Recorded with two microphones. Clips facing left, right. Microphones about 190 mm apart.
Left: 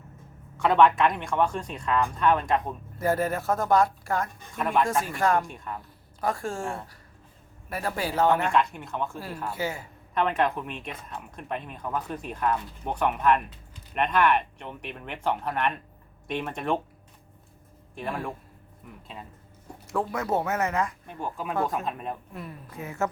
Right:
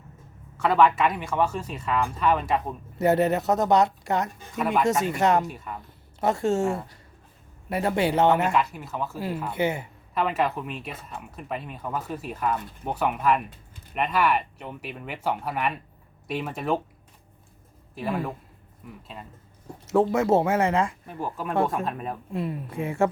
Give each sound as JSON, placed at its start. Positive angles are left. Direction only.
{"t": 0.5, "sound": "speech", "side_deg": 0}
{"t": 3.0, "sound": "speech", "side_deg": -25}
{"t": 4.5, "sound": "speech", "side_deg": -5}
{"t": 5.0, "sound": "speech", "side_deg": -20}
{"t": 5.5, "sound": "speech", "side_deg": -5}
{"t": 6.1, "sound": "speech", "side_deg": -25}
{"t": 7.7, "sound": "speech", "side_deg": -20}
{"t": 8.5, "sound": "speech", "side_deg": -5}
{"t": 9.5, "sound": "speech", "side_deg": -20}
{"t": 10.2, "sound": "speech", "side_deg": -5}
{"t": 17.9, "sound": "speech", "side_deg": -5}
{"t": 19.9, "sound": "speech", "side_deg": -25}
{"t": 21.1, "sound": "speech", "side_deg": 0}
{"t": 22.3, "sound": "speech", "side_deg": -25}